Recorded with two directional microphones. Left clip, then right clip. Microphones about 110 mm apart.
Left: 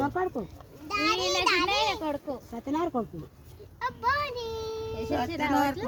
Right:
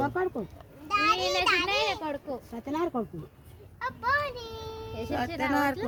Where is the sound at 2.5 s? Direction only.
20° right (ahead or behind).